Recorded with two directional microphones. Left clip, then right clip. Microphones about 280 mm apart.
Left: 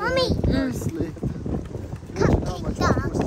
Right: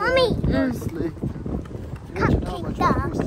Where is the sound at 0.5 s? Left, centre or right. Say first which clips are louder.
Right 2 dB; centre.